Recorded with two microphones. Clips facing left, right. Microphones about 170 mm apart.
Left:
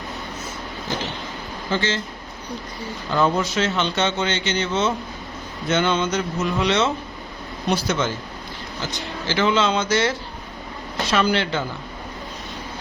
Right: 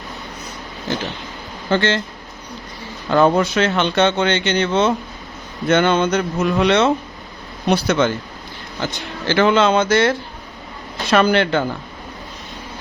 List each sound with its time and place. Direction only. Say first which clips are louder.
1.7 s speech: right 6 dB; 60° right (ahead or behind)
3.1 s speech: right 6 dB; 60° right (ahead or behind)